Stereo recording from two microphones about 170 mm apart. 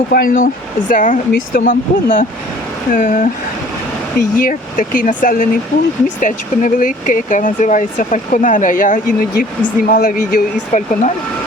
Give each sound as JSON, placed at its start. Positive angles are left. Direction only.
{"t": 0.1, "sound": "speech", "side_deg": 55}
{"t": 4.4, "sound": "speech", "side_deg": 55}